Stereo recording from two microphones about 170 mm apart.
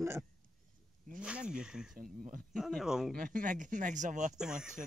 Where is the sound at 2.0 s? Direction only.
55° right (ahead or behind).